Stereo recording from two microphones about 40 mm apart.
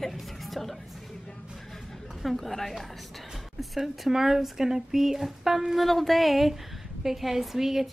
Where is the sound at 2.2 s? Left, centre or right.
Centre.